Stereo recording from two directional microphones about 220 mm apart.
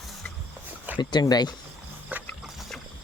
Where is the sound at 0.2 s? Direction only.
5° left (ahead or behind).